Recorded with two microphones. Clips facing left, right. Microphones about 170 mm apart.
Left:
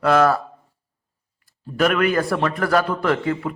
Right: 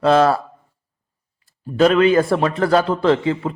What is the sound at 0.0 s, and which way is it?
Speech, 25° right (ahead or behind).